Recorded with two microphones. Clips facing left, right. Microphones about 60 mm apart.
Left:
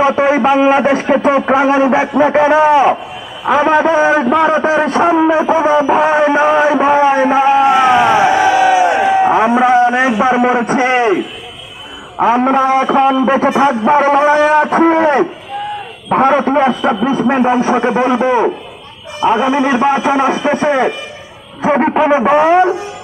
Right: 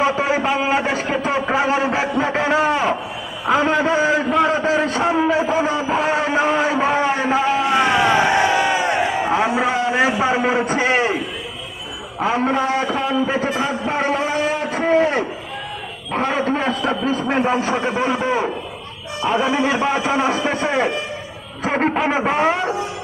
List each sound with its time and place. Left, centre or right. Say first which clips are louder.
0.0 s a man's voice: left 7 dB; left
7.7 s crowd: left 6 dB; centre
9.2 s a sound: left 8 dB; left
12.2 s a man's voice: left 8 dB; left
14.5 s a sound: left 8 dB; left
16.2 s a man's voice: left 9 dB; left
16.6 s a man's voice: left 7 dB; centre